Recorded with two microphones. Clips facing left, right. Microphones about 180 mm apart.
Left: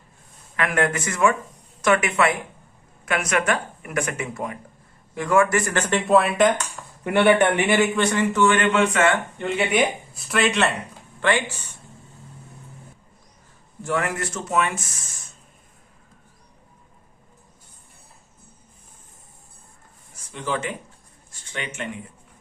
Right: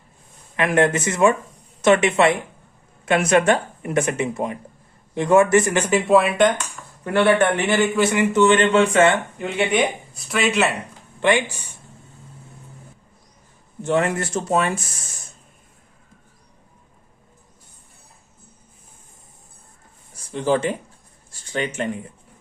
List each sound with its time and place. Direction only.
0.5 s speech: 20° right (ahead or behind); by 6.5 s centre (ahead or behind)
7.0 s a man's voice: 15° left (ahead or behind)
7.9 s speech: 10° right (ahead or behind); by 9.1 s 30° right (ahead or behind)
9.4 s speech: centre (ahead or behind)
11.2 s speech: 15° right (ahead or behind)
13.8 s speech: 25° right (ahead or behind)
20.1 s speech: 35° right (ahead or behind)